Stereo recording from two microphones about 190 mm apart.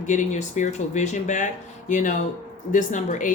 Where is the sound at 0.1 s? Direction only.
40° left (ahead or behind).